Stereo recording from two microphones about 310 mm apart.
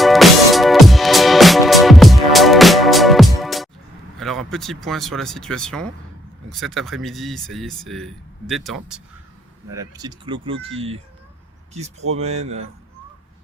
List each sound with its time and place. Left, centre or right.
0.0 s music: centre
4.2 s speech: centre
9.7 s speech: centre
12.1 s speech: right